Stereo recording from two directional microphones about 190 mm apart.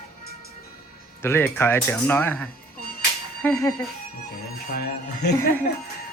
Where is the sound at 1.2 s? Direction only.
10° left (ahead or behind).